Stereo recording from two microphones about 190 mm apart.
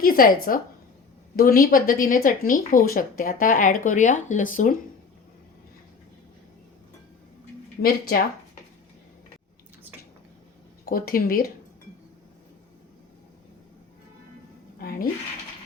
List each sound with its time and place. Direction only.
0.0 s a woman's voice: 50° left (ahead or behind)
1.4 s speech: 50° left (ahead or behind)
7.8 s speech: 50° left (ahead or behind)
10.8 s speech: 50° left (ahead or behind)
14.8 s a sound: 50° left (ahead or behind)